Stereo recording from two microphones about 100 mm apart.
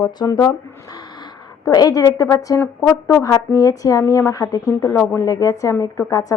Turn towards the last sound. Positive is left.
turn(degrees=35)  # may be behind; listen again after turning